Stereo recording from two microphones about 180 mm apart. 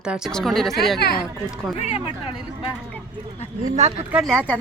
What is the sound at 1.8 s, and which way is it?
Speech, 35° left (ahead or behind).